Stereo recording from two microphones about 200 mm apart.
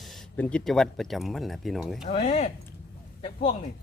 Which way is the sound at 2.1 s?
35° left (ahead or behind).